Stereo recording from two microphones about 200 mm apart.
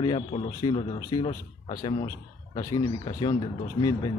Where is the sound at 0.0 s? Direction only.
25° left (ahead or behind).